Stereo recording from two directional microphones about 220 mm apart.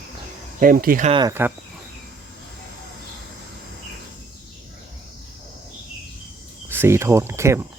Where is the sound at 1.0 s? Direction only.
20° right (ahead or behind).